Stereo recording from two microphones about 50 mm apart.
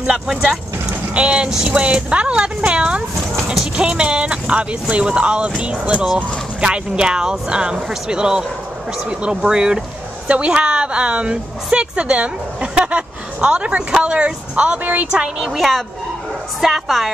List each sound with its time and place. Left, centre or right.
0.1 s a woman's voice: centre
6.6 s a woman's voice: centre
15.4 s a woman's voice: centre